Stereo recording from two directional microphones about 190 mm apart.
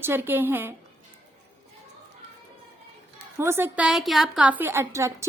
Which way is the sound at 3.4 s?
10° right (ahead or behind).